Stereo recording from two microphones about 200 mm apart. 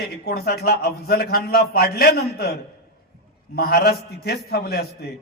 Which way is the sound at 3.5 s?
50° left (ahead or behind).